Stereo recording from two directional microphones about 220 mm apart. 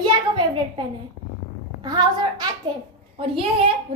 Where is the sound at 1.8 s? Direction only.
20° right (ahead or behind).